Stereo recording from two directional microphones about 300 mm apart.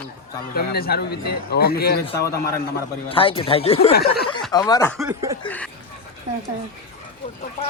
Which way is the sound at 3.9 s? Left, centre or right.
Left.